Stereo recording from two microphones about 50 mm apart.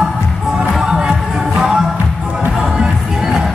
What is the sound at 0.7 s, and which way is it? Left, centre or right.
Music, centre.